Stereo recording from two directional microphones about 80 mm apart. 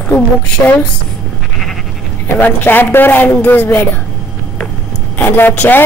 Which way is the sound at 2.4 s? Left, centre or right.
Left.